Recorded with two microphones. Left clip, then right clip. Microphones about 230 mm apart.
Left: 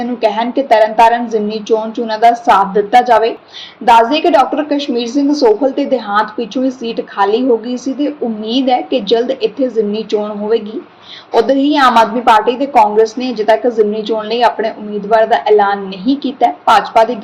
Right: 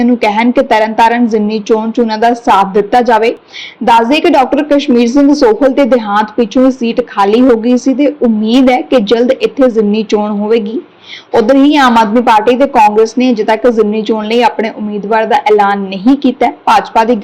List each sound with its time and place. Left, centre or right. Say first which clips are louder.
0.0 s a woman's voice: right 4 dB; right